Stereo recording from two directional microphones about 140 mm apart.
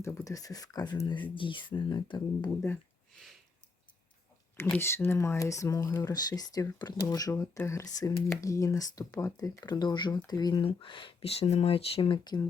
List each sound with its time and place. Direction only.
0.0 s speech: 20° left (ahead or behind)
4.5 s speech: 15° left (ahead or behind)